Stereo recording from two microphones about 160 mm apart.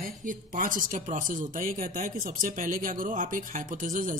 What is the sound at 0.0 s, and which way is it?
Speech, 55° right (ahead or behind).